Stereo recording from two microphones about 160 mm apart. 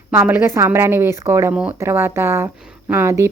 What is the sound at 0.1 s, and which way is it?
Speech, 15° right (ahead or behind).